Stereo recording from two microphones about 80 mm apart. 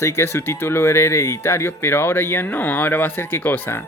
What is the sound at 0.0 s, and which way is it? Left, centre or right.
Speech, left.